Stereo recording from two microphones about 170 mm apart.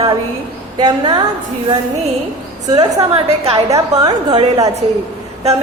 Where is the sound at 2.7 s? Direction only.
25° right (ahead or behind).